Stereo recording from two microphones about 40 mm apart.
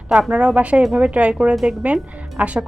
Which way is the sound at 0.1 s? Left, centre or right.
Right.